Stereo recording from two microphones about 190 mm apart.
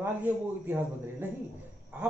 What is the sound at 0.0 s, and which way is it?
Speech, 10° right (ahead or behind).